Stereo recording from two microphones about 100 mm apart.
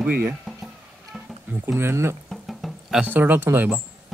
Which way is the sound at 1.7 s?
25° right (ahead or behind).